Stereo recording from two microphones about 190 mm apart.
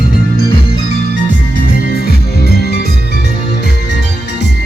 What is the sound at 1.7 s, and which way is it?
Music, 50° left (ahead or behind).